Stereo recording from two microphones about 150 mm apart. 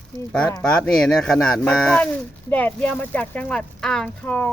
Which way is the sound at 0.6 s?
5° left (ahead or behind).